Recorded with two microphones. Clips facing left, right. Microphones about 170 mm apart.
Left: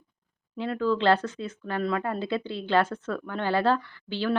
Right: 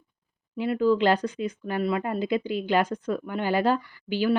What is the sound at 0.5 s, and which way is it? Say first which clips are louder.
A woman's voice: right 4 dB; 10° right (ahead or behind).